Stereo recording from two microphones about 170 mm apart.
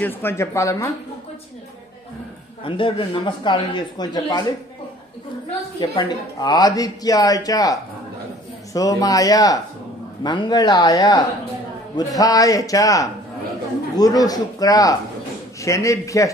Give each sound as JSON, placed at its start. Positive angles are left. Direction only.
{"t": 0.0, "sound": "a woman's voice", "side_deg": 15}
{"t": 2.6, "sound": "speech", "side_deg": 30}
{"t": 5.8, "sound": "a woman's voice", "side_deg": 25}